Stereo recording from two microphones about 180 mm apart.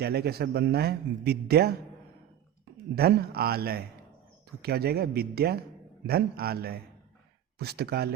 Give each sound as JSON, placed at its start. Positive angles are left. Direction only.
{"t": 0.0, "sound": "a man's voice", "side_deg": -60}
{"t": 2.9, "sound": "a man's voice", "side_deg": -60}